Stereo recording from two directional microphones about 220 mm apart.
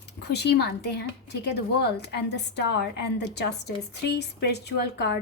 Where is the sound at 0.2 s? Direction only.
50° left (ahead or behind).